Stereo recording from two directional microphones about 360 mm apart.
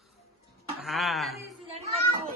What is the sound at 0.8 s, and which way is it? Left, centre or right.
Speech, centre.